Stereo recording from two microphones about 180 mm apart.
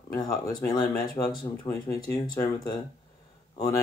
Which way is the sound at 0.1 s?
20° left (ahead or behind).